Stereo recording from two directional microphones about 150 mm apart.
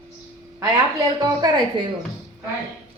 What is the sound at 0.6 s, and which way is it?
A woman's voice, 25° right (ahead or behind).